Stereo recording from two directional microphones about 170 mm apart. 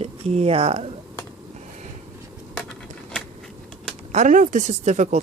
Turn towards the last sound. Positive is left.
turn(degrees=-45)  # may be behind; listen again after turning